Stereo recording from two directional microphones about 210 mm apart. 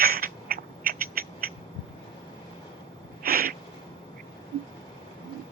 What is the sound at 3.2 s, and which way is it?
Owl, 45° right (ahead or behind).